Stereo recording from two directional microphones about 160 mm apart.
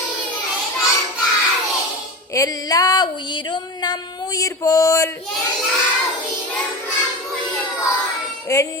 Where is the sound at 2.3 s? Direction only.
20° left (ahead or behind).